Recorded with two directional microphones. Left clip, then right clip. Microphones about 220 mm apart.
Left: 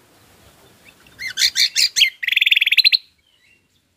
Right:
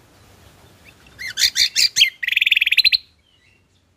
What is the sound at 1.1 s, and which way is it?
Bird, centre (ahead or behind).